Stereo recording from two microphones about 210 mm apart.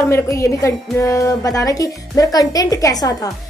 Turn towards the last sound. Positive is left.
turn(degrees=15)  # may be behind; listen again after turning